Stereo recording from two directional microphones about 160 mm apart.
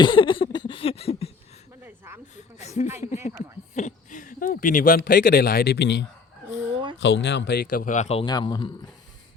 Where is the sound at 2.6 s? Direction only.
45° left (ahead or behind).